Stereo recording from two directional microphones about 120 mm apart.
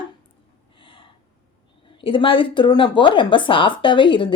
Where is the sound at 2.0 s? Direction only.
45° left (ahead or behind).